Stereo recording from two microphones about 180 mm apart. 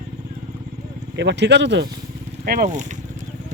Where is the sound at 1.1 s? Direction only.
75° right (ahead or behind).